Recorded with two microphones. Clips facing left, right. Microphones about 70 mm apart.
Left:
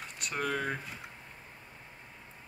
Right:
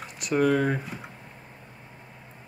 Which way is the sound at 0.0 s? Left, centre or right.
Centre.